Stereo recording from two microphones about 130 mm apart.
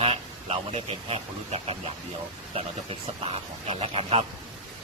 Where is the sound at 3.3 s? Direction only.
50° right (ahead or behind).